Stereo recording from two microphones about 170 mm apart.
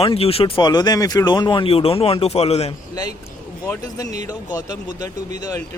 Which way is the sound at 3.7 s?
20° left (ahead or behind).